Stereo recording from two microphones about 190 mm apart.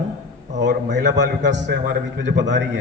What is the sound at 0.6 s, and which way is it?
A man's voice, 65° right (ahead or behind).